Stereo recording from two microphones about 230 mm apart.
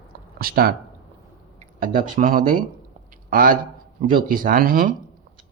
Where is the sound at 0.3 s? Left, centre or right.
Right.